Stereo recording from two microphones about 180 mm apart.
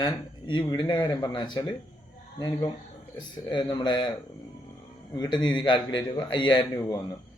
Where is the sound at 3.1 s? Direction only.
25° left (ahead or behind).